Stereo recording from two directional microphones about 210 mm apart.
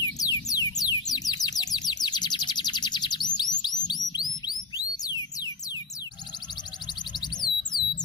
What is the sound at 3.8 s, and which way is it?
Music, 20° left (ahead or behind).